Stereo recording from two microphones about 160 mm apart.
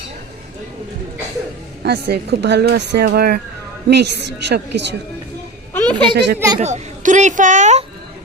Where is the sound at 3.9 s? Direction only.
90° right.